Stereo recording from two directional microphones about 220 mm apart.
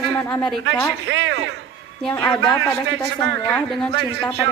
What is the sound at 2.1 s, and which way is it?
Speech, 15° left (ahead or behind).